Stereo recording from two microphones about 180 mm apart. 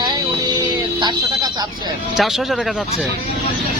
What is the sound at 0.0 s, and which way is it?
Music, 25° right (ahead or behind).